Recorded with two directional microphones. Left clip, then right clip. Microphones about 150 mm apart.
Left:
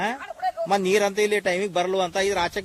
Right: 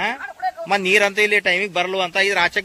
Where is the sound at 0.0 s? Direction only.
30° left (ahead or behind).